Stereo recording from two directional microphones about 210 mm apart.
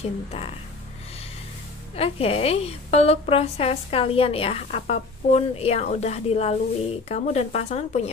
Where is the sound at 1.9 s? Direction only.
30° left (ahead or behind).